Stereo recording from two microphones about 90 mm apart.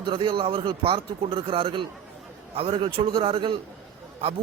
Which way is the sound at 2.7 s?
65° right (ahead or behind).